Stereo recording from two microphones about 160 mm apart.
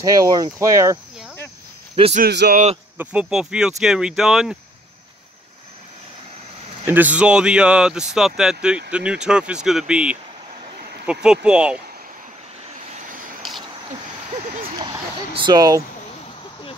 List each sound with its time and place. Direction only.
0.0 s speech: 20° right (ahead or behind)
2.2 s a man's voice: 85° right
3.0 s speech: 10° right (ahead or behind)
6.9 s speech: 10° right (ahead or behind)
13.4 s a sound: centre (ahead or behind)
14.6 s a sound: 30° right (ahead or behind)